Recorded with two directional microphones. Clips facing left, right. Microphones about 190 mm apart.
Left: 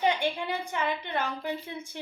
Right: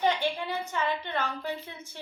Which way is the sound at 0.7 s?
15° left (ahead or behind).